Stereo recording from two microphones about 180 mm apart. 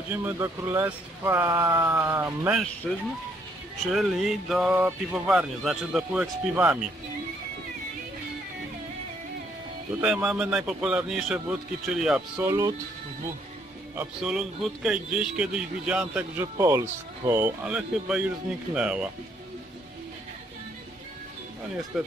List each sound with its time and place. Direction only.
0.1 s speech: 10° right (ahead or behind)
3.9 s speech: centre (ahead or behind)
10.0 s speech: 5° right (ahead or behind)
12.4 s speech: 20° right (ahead or behind)
13.9 s speech: 5° right (ahead or behind)
17.6 s speech: 5° right (ahead or behind)
21.9 s speech: centre (ahead or behind)